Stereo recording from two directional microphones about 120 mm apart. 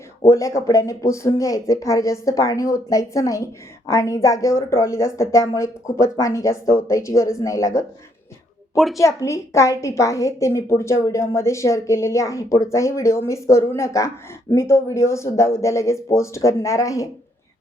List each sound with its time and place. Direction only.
0.3 s a woman's voice: 25° left (ahead or behind)
8.7 s speech: centre (ahead or behind)
9.0 s a woman's voice: 25° left (ahead or behind)